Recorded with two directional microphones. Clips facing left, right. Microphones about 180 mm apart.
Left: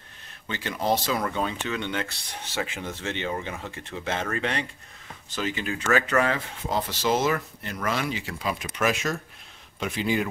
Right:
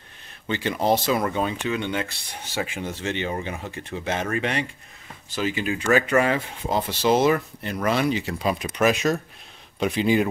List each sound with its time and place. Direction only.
0.5 s speech: 20° right (ahead or behind)
7.2 s speech: 30° right (ahead or behind)
8.3 s speech: 35° right (ahead or behind)
8.8 s speech: 20° right (ahead or behind)